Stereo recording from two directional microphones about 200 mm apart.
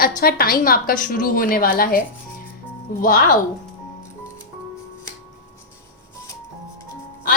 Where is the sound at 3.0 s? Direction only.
45° left (ahead or behind).